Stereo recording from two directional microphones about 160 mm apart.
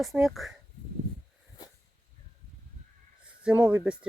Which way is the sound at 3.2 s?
5° right (ahead or behind).